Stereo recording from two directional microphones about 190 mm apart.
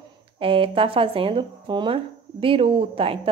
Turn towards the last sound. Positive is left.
turn(degrees=-30)  # may be behind; listen again after turning